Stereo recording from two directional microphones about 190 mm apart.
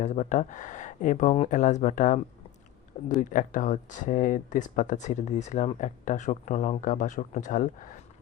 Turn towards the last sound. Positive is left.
turn(degrees=40)  # may be behind; listen again after turning